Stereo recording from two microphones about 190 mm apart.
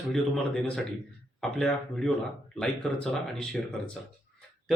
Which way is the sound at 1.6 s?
Centre (ahead or behind).